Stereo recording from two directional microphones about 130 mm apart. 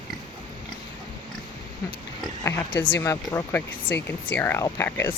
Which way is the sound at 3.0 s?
25° left (ahead or behind).